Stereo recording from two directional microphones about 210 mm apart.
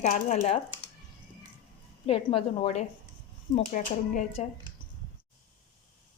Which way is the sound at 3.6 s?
40° left (ahead or behind).